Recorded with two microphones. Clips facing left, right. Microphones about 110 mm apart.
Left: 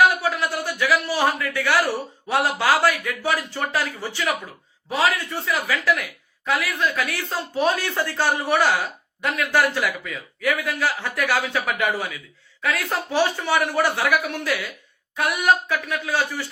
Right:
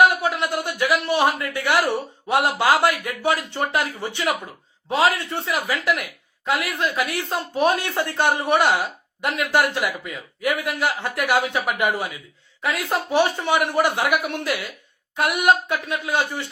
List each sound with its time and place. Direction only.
0.2 s a man's voice: 20° right (ahead or behind)